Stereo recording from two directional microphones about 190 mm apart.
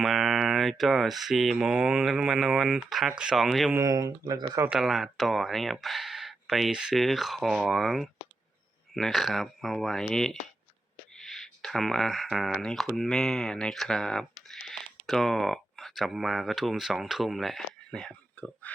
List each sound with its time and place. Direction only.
0.0 s speech: centre (ahead or behind)
3.8 s speech: 20° right (ahead or behind)
4.7 s speech: centre (ahead or behind)